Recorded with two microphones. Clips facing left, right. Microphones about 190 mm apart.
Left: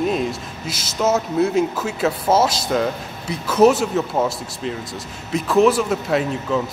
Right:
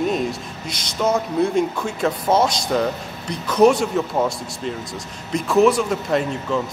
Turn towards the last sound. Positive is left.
turn(degrees=5)  # may be behind; listen again after turning